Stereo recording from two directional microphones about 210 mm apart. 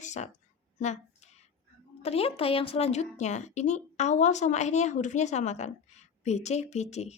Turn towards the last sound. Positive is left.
turn(degrees=30)  # may be behind; listen again after turning